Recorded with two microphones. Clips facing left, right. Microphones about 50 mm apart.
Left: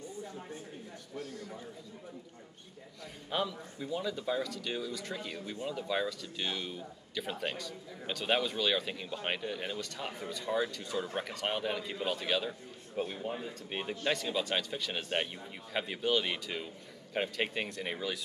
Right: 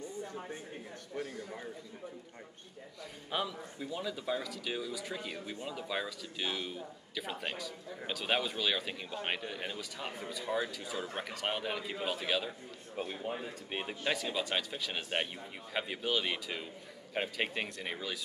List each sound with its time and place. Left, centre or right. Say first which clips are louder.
1.1 s a man's voice: right 3 dB; right
3.3 s speech: left 2 dB; centre